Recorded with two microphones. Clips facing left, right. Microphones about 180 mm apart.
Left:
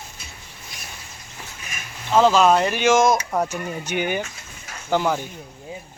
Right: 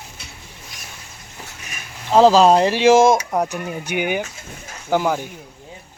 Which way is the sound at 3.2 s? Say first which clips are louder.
Right 2 dB; 15° right (ahead or behind).